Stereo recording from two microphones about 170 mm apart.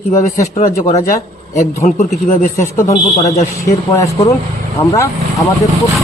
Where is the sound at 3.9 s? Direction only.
15° left (ahead or behind).